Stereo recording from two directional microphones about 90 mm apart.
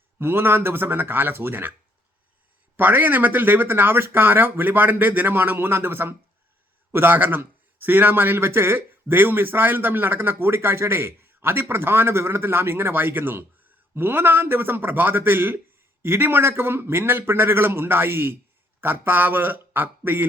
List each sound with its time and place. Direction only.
0.2 s a man's voice: 25° right (ahead or behind)
2.7 s a man's voice: 20° right (ahead or behind)